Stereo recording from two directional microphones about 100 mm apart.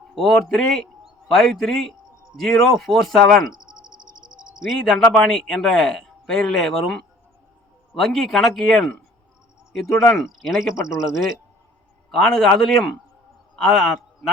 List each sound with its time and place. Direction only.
0.1 s a man's voice: 5° left (ahead or behind)
3.6 s a sound: 45° right (ahead or behind)
4.8 s a man's voice: 5° left (ahead or behind)
12.1 s a man's voice: 5° left (ahead or behind)